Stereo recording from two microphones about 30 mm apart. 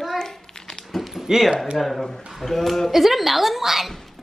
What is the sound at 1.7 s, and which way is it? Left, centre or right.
A woman's voice, centre.